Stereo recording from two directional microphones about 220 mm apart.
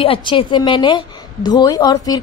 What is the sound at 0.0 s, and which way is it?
A woman's voice, 25° left (ahead or behind).